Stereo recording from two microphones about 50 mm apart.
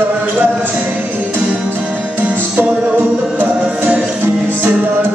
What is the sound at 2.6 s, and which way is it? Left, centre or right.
Chant, right.